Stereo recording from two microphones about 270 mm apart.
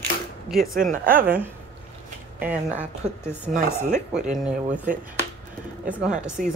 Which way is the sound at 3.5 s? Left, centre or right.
Right.